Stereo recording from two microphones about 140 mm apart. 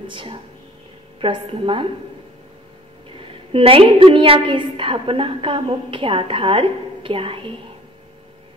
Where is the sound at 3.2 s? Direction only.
40° right (ahead or behind).